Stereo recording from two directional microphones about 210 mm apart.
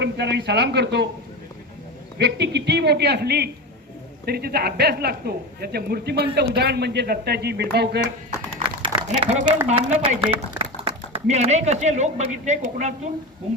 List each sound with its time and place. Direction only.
0.0 s speech: 55° right (ahead or behind)
2.1 s speech: 55° right (ahead or behind)
8.6 s a sound: 25° right (ahead or behind)
9.0 s a woman's voice: 30° right (ahead or behind)